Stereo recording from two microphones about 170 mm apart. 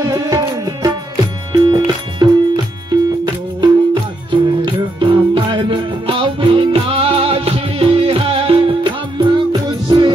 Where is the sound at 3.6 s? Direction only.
30° right (ahead or behind).